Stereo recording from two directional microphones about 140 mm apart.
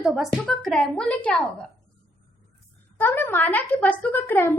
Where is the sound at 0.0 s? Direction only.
5° right (ahead or behind).